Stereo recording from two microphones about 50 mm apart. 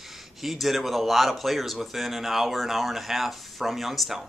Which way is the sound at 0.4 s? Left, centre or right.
Centre.